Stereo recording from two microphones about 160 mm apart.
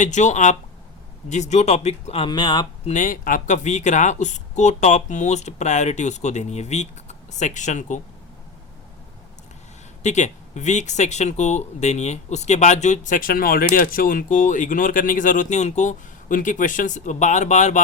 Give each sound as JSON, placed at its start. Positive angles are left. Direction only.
{"t": 0.0, "sound": "speech", "side_deg": 50}
{"t": 2.9, "sound": "speech", "side_deg": 55}
{"t": 10.0, "sound": "speech", "side_deg": 45}